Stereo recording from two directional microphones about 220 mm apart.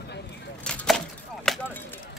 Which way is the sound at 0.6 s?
5° left (ahead or behind).